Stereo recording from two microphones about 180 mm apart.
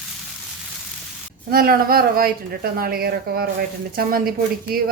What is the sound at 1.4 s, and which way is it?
Speech, 55° right (ahead or behind).